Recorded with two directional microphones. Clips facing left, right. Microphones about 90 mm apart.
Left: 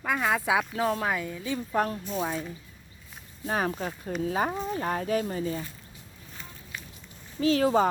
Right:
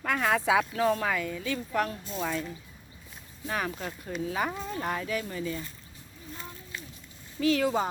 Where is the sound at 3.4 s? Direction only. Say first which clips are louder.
Left 4 dB; 40° left (ahead or behind).